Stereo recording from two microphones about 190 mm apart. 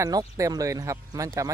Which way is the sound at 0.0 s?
20° right (ahead or behind).